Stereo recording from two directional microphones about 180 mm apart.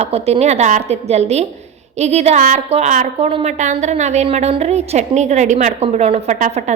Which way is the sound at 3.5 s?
40° right (ahead or behind).